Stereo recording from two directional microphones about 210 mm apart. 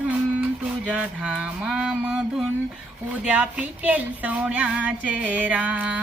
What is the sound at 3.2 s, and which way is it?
Speech, 5° right (ahead or behind).